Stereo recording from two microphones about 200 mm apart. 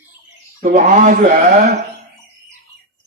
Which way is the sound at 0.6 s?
40° right (ahead or behind).